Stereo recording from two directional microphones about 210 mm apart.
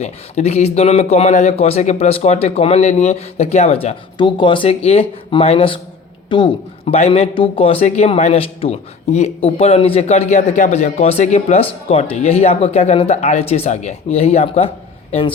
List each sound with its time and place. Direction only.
0.0 s a man's voice: 30° left (ahead or behind)